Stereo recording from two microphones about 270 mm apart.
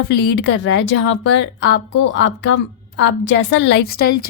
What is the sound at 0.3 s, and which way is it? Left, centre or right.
A woman's voice, left.